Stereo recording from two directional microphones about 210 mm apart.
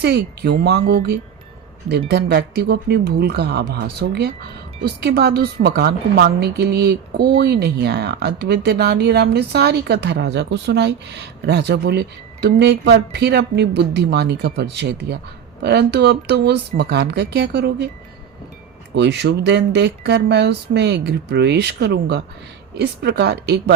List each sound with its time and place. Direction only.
0.0 s a woman's voice: 50° right (ahead or behind)
18.9 s a woman's voice: 55° right (ahead or behind)